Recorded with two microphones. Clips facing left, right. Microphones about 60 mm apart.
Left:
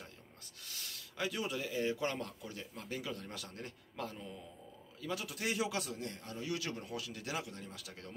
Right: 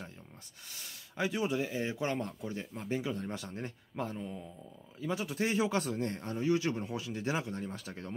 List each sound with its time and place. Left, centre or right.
0.7 s a man's voice: right